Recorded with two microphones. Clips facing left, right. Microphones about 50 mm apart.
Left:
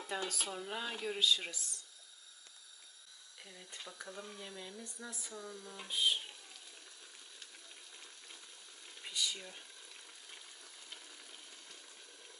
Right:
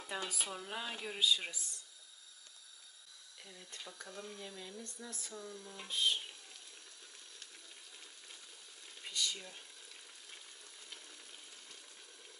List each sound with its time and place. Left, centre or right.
0.0 s speech: centre
1.2 s speech: centre
3.4 s speech: centre
8.8 s a sound: centre